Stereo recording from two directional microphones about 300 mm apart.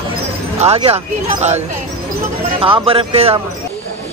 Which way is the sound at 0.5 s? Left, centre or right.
Right.